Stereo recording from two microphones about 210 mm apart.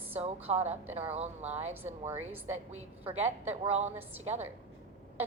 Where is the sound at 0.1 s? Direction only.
30° right (ahead or behind).